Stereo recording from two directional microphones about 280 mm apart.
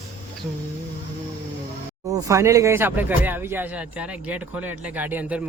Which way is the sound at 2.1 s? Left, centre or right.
Centre.